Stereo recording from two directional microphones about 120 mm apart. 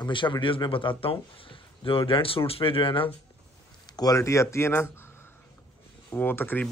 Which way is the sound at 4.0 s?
25° left (ahead or behind).